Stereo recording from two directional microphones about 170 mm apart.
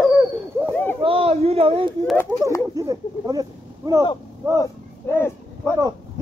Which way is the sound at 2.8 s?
20° right (ahead or behind).